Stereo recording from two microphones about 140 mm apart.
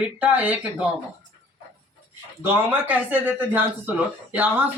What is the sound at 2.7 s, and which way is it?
Speech, 10° right (ahead or behind).